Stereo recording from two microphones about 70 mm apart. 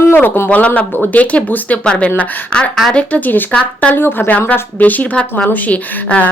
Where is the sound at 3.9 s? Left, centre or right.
Left.